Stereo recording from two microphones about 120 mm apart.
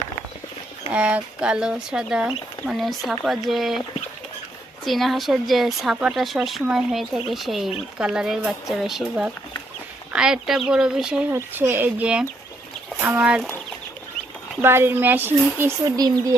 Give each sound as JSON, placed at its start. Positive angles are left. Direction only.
{"t": 0.9, "sound": "speech", "side_deg": -10}
{"t": 4.9, "sound": "speech", "side_deg": 0}
{"t": 11.3, "sound": "speech", "side_deg": -15}
{"t": 14.6, "sound": "speech", "side_deg": -20}
{"t": 16.0, "sound": "speech", "side_deg": -35}